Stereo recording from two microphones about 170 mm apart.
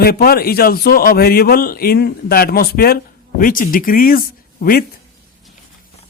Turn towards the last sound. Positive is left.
turn(degrees=60)  # may be behind; listen again after turning